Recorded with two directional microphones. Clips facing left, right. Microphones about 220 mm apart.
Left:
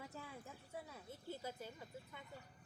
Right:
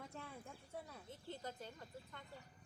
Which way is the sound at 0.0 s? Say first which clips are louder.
Even; 5° left (ahead or behind).